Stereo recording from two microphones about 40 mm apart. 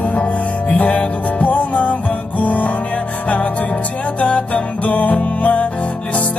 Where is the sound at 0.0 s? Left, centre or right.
Left.